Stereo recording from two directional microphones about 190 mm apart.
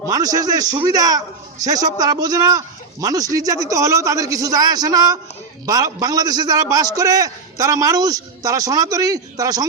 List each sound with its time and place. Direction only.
0.1 s a man's voice: 20° right (ahead or behind)